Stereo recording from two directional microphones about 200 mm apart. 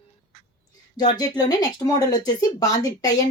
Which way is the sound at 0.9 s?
20° left (ahead or behind).